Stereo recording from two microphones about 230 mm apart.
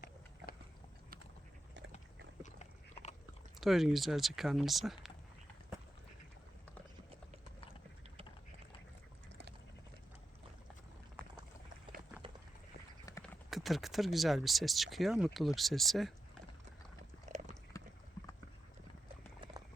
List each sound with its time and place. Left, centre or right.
2.4 s biting: left
3.6 s speech: centre
13.2 s speech: centre
17.2 s biting: right